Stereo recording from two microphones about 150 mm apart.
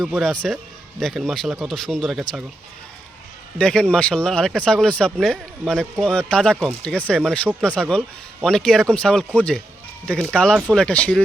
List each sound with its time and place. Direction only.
0.0 s a man's voice: 5° left (ahead or behind)
3.6 s speech: 5° left (ahead or behind)